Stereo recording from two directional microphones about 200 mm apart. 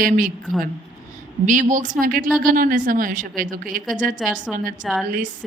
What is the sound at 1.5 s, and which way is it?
Speech, 40° right (ahead or behind).